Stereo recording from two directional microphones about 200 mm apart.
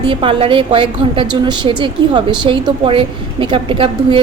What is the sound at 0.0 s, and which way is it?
A woman's voice, 25° right (ahead or behind).